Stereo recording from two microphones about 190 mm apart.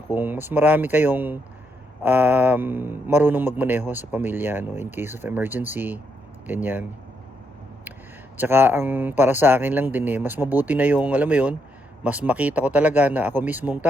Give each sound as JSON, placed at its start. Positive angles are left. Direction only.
{"t": 0.1, "sound": "speech", "side_deg": -10}
{"t": 8.4, "sound": "speech", "side_deg": -10}